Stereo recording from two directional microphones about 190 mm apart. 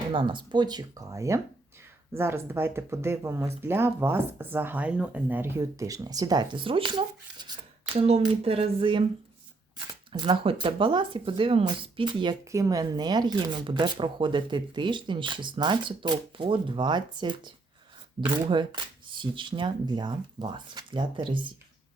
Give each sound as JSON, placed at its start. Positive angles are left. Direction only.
{"t": 0.1, "sound": "speech", "side_deg": -25}
{"t": 7.9, "sound": "a sound", "side_deg": -35}
{"t": 9.7, "sound": "speech", "side_deg": -25}